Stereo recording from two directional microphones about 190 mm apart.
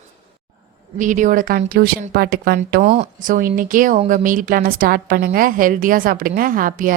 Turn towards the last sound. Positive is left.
turn(degrees=-45)  # may be behind; listen again after turning